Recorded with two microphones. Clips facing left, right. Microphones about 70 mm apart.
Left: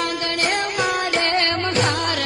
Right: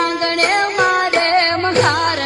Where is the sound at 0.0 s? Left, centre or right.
Right.